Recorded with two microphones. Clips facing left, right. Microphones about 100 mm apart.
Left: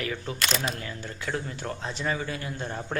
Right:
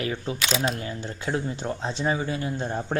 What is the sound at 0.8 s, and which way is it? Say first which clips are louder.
Speech: right 4 dB; 25° right (ahead or behind).